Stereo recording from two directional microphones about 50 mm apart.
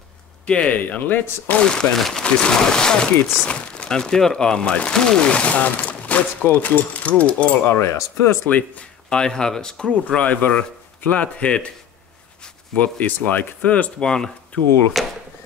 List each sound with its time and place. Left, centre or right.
0.5 s speech: left
1.6 s speech: centre
2.0 s speech: centre
2.2 s speech: centre
7.6 s speech: left
8.5 s speech: left
9.1 s speech: centre
12.7 s speech: left
13.9 s speech: centre
15.0 s speech: centre